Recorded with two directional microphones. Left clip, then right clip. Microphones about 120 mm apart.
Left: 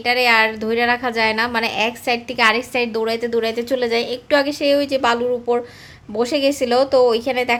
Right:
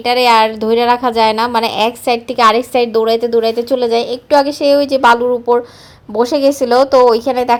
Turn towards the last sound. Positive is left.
turn(degrees=-30)  # may be behind; listen again after turning